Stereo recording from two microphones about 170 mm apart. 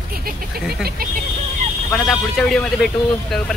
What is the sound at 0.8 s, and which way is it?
Speech, 60° right (ahead or behind).